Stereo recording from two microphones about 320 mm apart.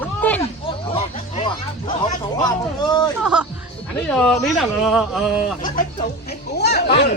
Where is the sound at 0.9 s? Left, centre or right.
Left.